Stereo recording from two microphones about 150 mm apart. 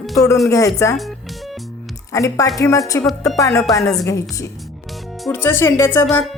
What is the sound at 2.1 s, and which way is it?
A woman's voice, 20° left (ahead or behind).